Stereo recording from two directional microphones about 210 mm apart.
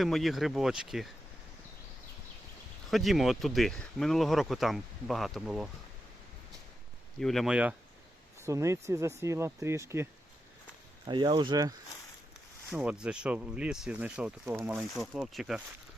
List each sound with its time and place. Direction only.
0.0 s speech: centre (ahead or behind)
2.9 s speech: centre (ahead or behind)
7.2 s speech: centre (ahead or behind); by 11.7 s 20° right (ahead or behind)
12.7 s speech: 5° right (ahead or behind)